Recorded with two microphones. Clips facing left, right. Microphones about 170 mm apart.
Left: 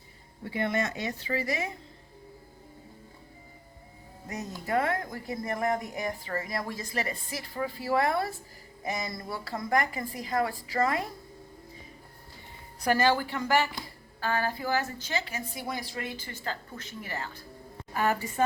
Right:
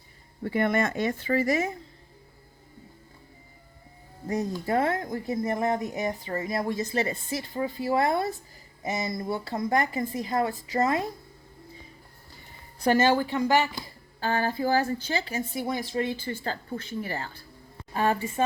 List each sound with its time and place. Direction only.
0.4 s speech: 50° right (ahead or behind)
4.3 s speech: 30° right (ahead or behind)
12.8 s speech: 25° right (ahead or behind)